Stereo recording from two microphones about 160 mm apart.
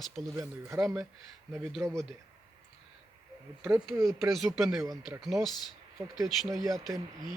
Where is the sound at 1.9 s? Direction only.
5° left (ahead or behind).